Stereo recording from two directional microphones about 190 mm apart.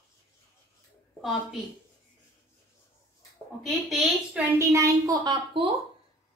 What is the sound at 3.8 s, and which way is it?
Speech, centre (ahead or behind).